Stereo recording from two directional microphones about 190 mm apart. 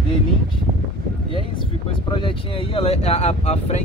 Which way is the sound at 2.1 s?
25° left (ahead or behind).